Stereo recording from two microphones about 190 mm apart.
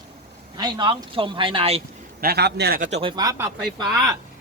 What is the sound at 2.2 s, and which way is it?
Speech, 55° right (ahead or behind).